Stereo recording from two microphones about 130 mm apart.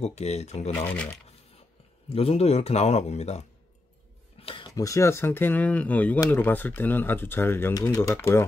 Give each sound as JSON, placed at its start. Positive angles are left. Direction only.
{"t": 0.0, "sound": "speech", "side_deg": 60}
{"t": 0.7, "sound": "speech", "side_deg": 15}
{"t": 2.0, "sound": "speech", "side_deg": 50}
{"t": 4.4, "sound": "a sound", "side_deg": 45}
{"t": 4.6, "sound": "speech", "side_deg": 25}